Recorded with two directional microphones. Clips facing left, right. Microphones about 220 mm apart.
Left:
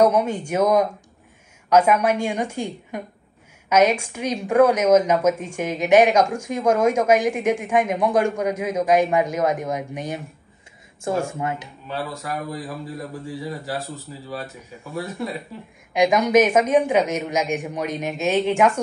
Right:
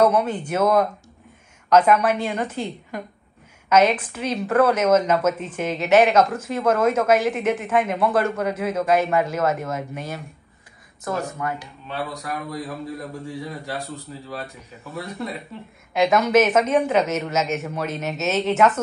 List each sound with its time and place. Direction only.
0.0 s speech: 10° left (ahead or behind)
11.1 s speech: 25° left (ahead or behind)
12.0 s a man's voice: centre (ahead or behind)
15.9 s speech: 15° left (ahead or behind)